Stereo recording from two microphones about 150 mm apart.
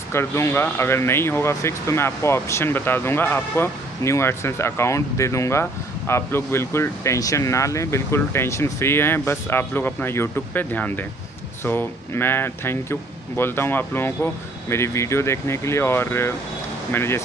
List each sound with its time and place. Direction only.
0.1 s speech: 15° left (ahead or behind)